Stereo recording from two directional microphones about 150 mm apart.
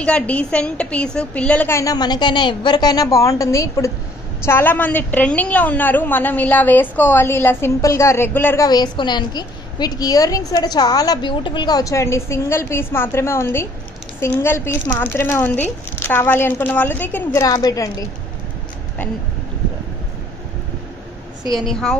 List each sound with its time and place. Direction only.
0.0 s a woman's voice: 10° left (ahead or behind)
8.6 s a woman's voice: 25° left (ahead or behind)
21.5 s a woman's voice: centre (ahead or behind)